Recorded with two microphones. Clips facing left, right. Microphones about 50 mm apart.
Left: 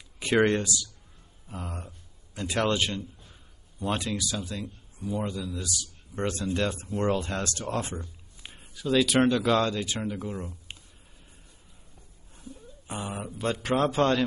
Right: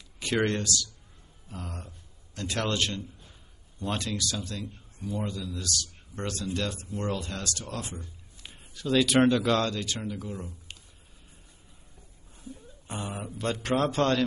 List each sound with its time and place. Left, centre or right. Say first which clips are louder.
0.2 s a man's voice: left 4 dB; centre; by 7.9 s left
8.4 s a sound: left 2 dB; centre
8.7 s a man's voice: even; centre; by 10.8 s left
12.8 s a man's voice: left 1 dB; centre